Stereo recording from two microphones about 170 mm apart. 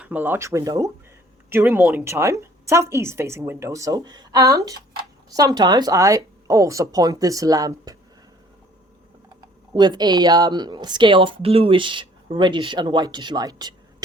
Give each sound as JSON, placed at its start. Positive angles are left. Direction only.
{"t": 0.0, "sound": "a woman's voice", "side_deg": -10}
{"t": 9.7, "sound": "speech", "side_deg": -25}